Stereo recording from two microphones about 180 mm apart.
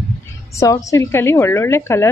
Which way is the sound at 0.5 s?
15° left (ahead or behind).